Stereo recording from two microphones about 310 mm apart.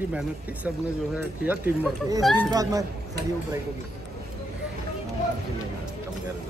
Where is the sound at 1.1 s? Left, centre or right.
Centre.